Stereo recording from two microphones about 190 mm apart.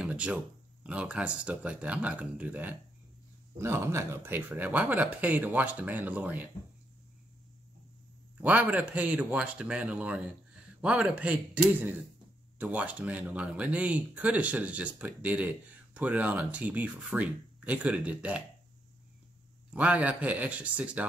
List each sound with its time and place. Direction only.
0.0 s a sound: 5° right (ahead or behind)
0.8 s speech: 5° right (ahead or behind)
8.4 s speech: 10° right (ahead or behind)
19.7 s speech: 5° right (ahead or behind)